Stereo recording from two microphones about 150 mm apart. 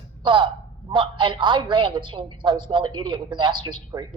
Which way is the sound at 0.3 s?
35° right (ahead or behind).